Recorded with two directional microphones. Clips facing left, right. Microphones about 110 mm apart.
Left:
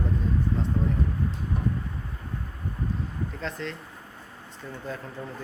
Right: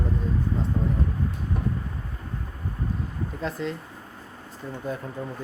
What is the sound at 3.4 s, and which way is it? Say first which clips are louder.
Speech: right 6 dB; 5° right (ahead or behind).